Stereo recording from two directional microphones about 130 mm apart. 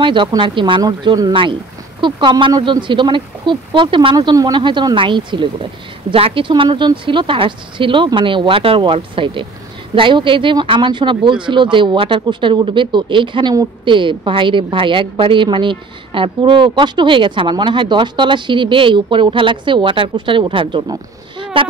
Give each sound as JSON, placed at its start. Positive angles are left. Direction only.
{"t": 0.0, "sound": "speech", "side_deg": -40}